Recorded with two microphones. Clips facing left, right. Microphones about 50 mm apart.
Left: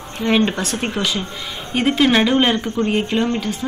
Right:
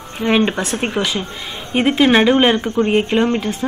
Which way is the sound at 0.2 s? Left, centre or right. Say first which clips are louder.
Right 1 dB; centre.